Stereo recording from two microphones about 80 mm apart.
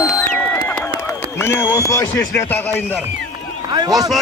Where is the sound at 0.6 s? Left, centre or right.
Left.